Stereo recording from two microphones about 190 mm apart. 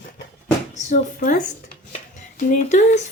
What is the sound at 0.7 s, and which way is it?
A woman's voice, 40° left (ahead or behind).